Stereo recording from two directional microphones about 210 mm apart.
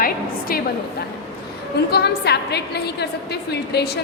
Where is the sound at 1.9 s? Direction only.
50° left (ahead or behind).